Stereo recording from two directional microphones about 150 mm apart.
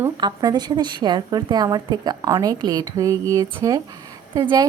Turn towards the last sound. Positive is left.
turn(degrees=-25)  # may be behind; listen again after turning